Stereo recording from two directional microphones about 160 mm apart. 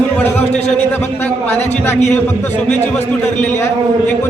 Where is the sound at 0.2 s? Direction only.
10° left (ahead or behind).